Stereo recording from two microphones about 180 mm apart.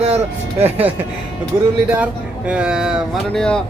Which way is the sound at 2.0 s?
5° right (ahead or behind).